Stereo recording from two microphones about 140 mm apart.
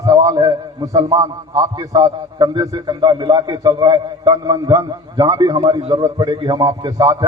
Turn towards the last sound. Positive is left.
turn(degrees=-30)  # may be behind; listen again after turning